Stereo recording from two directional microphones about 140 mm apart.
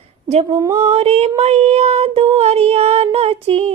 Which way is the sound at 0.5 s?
20° right (ahead or behind).